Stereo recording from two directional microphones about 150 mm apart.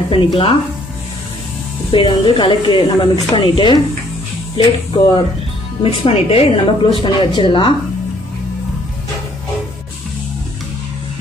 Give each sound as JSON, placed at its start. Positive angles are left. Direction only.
{"t": 0.1, "sound": "a woman's voice", "side_deg": 35}
{"t": 1.9, "sound": "a woman's voice", "side_deg": 35}